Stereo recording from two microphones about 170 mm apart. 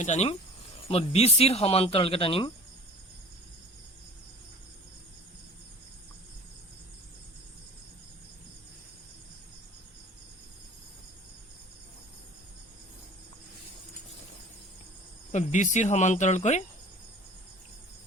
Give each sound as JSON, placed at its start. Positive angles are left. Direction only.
{"t": 0.0, "sound": "speech", "side_deg": 40}
{"t": 15.3, "sound": "speech", "side_deg": 45}